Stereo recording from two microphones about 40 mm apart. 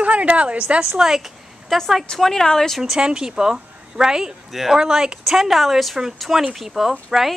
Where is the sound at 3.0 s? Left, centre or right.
Centre.